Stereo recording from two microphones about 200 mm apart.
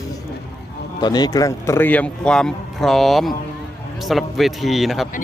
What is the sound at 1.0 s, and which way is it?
A man's voice, 20° left (ahead or behind).